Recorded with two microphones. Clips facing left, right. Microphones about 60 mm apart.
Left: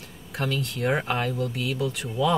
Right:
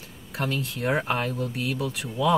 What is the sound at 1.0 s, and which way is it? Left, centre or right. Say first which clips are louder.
Speech: even; right.